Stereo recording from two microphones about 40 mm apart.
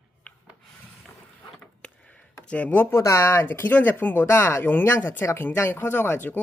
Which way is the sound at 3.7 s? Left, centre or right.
Left.